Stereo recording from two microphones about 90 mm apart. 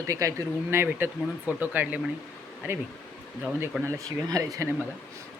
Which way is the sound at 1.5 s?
15° right (ahead or behind).